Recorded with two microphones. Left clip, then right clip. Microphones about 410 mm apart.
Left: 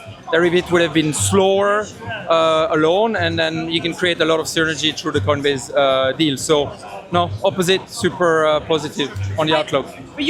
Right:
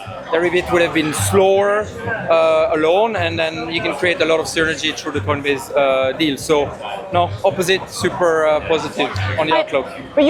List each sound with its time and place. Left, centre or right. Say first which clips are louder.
0.3 s speech: left 1 dB; left
9.7 s a man's voice: right 1 dB; left